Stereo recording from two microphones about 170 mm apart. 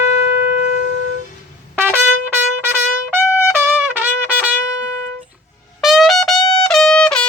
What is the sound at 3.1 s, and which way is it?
Trumpet, 15° right (ahead or behind).